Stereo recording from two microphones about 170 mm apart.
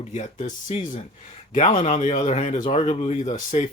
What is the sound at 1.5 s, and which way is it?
Speech, 45° left (ahead or behind).